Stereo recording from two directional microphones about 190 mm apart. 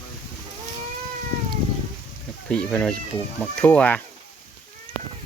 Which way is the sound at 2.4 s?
5° left (ahead or behind).